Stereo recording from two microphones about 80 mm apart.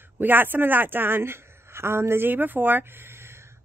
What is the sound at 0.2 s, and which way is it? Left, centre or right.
A woman's voice, right.